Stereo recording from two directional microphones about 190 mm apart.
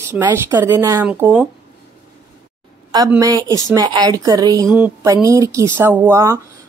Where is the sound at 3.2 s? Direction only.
20° right (ahead or behind).